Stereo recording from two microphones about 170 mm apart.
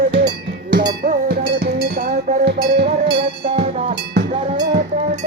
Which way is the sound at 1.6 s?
65° right (ahead or behind).